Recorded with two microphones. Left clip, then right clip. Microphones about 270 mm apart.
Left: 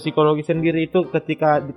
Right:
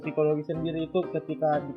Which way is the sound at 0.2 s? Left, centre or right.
Left.